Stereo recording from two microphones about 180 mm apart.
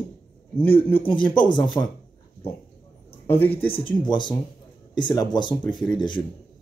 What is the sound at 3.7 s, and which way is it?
Speech, 25° left (ahead or behind).